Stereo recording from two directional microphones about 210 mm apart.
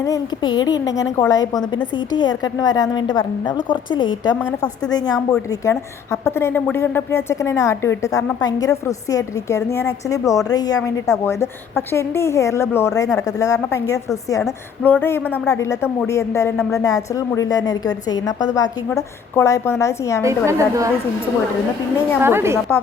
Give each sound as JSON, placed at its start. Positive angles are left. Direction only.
{"t": 0.0, "sound": "a woman's voice", "side_deg": 20}
{"t": 4.4, "sound": "a woman's voice", "side_deg": 5}
{"t": 4.9, "sound": "a woman's voice", "side_deg": 20}
{"t": 20.2, "sound": "a woman's voice", "side_deg": -15}
{"t": 22.2, "sound": "a woman's voice", "side_deg": -10}